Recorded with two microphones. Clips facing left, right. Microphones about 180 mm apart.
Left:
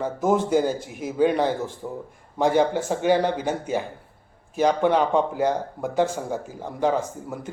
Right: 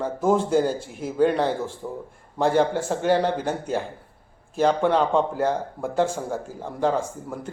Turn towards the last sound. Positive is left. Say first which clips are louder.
# even
turn(degrees=10)  # may be behind; listen again after turning